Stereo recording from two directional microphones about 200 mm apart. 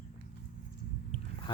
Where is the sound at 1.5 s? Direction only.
25° left (ahead or behind).